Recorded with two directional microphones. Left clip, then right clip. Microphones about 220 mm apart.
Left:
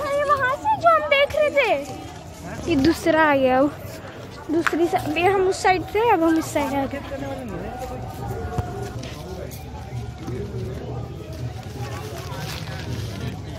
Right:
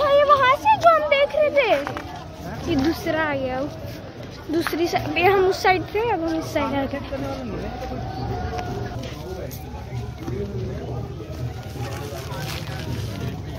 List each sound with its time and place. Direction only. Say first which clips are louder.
0.0 s a sound: right 5 dB; 15° right (ahead or behind); by 1.8 s 10° left (ahead or behind)
2.7 s a woman's voice: left 4 dB; 25° left (ahead or behind)
4.7 s speech: left 1 dB; 20° left (ahead or behind)
6.0 s speech: left 5 dB; 20° left (ahead or behind)